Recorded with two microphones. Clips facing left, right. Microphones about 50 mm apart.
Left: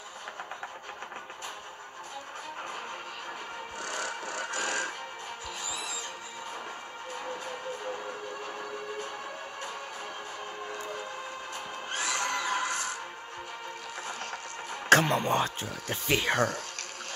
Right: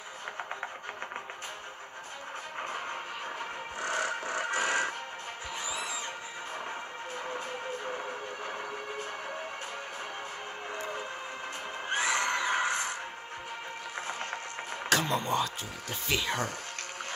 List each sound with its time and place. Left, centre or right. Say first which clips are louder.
3.8 s a sound: right 4 dB; right
11.9 s neigh: right 3 dB; right
14.9 s speech: left 6 dB; left